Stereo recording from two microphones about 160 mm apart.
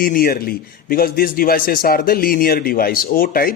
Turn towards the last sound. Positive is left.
turn(degrees=65)  # may be behind; listen again after turning